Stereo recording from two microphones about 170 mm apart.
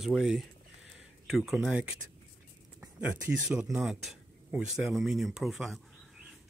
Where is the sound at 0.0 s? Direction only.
Centre (ahead or behind).